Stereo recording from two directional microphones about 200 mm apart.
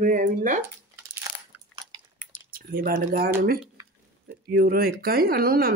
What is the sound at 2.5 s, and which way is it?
Speech, 45° right (ahead or behind).